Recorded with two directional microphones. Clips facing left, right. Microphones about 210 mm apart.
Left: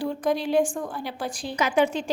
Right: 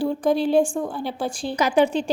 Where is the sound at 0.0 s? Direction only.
30° right (ahead or behind).